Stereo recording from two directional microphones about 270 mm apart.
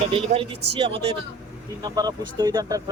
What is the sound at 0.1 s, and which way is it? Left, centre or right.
Speech, centre.